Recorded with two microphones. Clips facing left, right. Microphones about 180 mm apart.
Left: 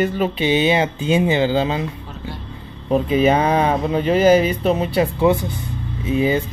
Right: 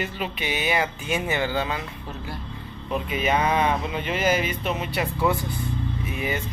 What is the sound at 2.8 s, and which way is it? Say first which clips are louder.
Speech: left 10 dB; 35° left (ahead or behind).